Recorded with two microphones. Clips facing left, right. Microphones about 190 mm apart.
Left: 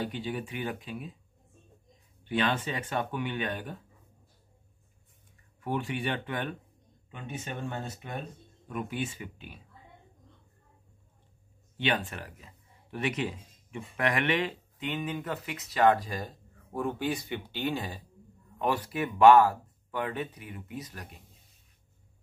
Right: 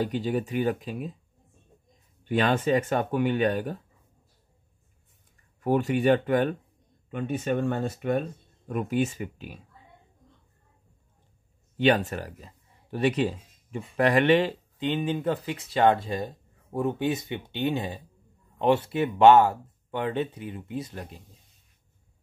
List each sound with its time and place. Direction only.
0.0 s speech: 40° right (ahead or behind)
2.2 s speech: 45° right (ahead or behind)
5.6 s speech: 45° right (ahead or behind)
7.1 s speech: 55° right (ahead or behind)
8.6 s speech: 45° right (ahead or behind)
11.7 s speech: 40° right (ahead or behind)